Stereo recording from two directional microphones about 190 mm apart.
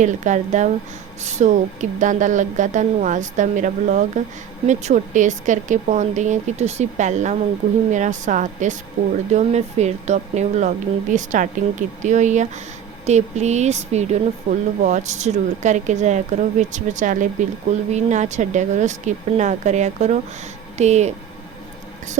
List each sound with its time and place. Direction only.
0.0 s a woman's voice: 40° right (ahead or behind)